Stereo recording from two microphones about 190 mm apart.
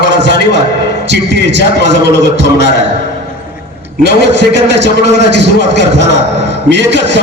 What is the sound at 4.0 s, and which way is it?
A man's voice, 65° right (ahead or behind).